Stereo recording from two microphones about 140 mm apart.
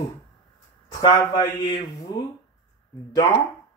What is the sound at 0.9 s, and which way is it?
A man's voice, 30° left (ahead or behind).